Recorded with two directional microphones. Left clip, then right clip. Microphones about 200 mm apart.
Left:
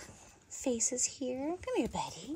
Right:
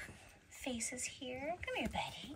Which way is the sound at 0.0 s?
75° left (ahead or behind).